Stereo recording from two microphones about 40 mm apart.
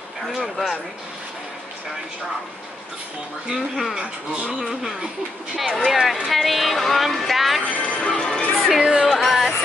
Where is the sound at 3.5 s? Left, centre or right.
Centre.